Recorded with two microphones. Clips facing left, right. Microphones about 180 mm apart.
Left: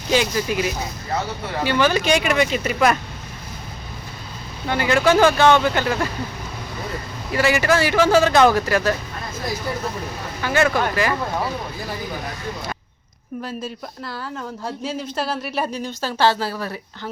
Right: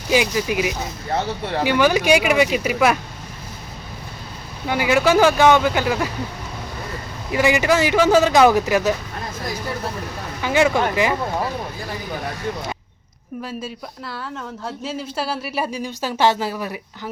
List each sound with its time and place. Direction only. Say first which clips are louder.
0.1 s speech: right 1 dB; 10° right (ahead or behind)
4.6 s speech: even; 10° right (ahead or behind)
7.3 s speech: right 1 dB; 15° right (ahead or behind)
10.4 s speech: right 2 dB; 15° right (ahead or behind)
13.4 s speech: even; 5° right (ahead or behind)